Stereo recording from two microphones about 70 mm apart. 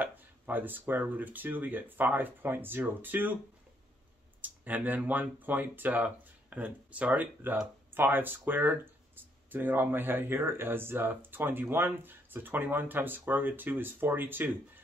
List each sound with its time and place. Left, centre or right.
0.0 s speech: right
4.4 s speech: right